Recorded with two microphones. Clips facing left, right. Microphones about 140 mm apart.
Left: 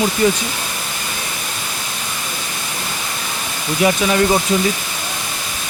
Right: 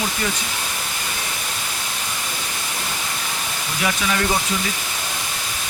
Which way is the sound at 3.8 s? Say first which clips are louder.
Left 8 dB; 25° left (ahead or behind).